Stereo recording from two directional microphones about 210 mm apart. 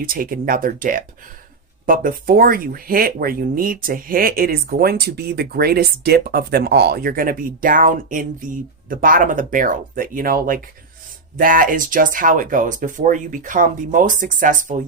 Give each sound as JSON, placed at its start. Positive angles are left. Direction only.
{"t": 0.0, "sound": "speech", "side_deg": -45}